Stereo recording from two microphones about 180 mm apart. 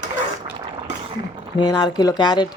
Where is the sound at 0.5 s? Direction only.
30° right (ahead or behind).